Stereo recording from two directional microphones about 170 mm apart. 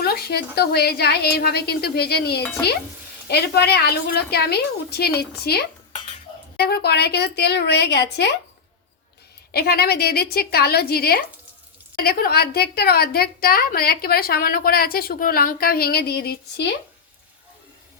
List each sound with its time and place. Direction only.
0.0 s a woman's voice: 65° left (ahead or behind)
9.5 s a woman's voice: 65° left (ahead or behind)